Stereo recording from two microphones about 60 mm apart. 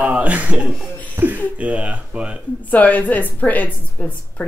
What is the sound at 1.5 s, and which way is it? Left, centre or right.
Speech, right.